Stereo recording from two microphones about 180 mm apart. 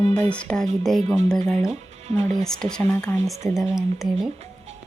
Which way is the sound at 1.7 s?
35° right (ahead or behind).